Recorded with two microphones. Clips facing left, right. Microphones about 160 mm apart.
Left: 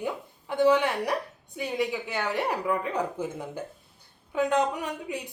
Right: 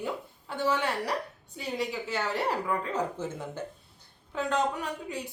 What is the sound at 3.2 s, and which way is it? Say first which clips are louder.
Speech: left 2 dB; 10° left (ahead or behind).